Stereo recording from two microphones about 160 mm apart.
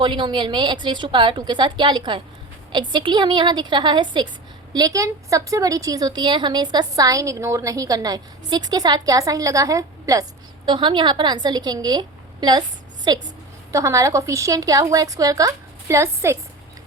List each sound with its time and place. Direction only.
0.0 s a woman's voice: 30° right (ahead or behind)